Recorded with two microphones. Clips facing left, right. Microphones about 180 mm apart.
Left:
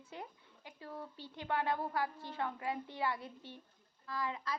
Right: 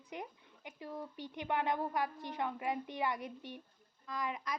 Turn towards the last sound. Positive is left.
turn(degrees=-15)  # may be behind; listen again after turning